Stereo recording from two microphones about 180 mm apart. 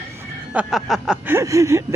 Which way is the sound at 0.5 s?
5° right (ahead or behind).